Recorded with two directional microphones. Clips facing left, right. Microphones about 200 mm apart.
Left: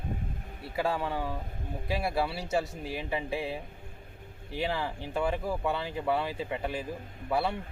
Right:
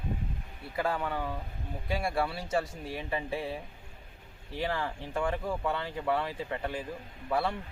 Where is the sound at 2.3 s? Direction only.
25° left (ahead or behind).